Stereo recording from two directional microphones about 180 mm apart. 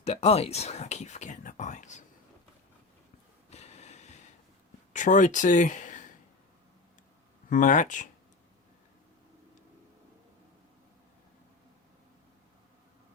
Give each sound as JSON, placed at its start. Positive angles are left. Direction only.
{"t": 0.0, "sound": "speech", "side_deg": 35}
{"t": 3.5, "sound": "snort", "side_deg": 40}
{"t": 4.9, "sound": "speech", "side_deg": 45}
{"t": 7.5, "sound": "speech", "side_deg": 45}